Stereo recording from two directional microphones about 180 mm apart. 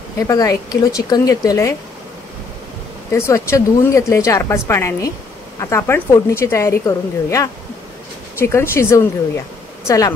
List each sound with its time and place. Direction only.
0.3 s speech: 20° left (ahead or behind)
3.1 s speech: 15° left (ahead or behind)